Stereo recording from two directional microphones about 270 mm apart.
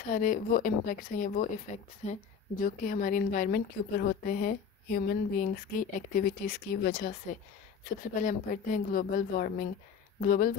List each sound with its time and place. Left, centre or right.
0.1 s a woman's voice: left
2.6 s a woman's voice: left